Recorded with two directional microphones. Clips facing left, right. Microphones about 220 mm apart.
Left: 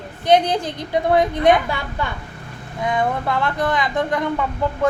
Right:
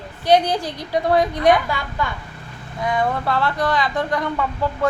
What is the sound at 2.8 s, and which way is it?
A woman's voice, 20° left (ahead or behind).